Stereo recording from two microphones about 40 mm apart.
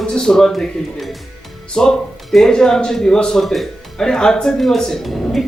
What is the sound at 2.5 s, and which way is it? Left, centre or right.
Speech, centre.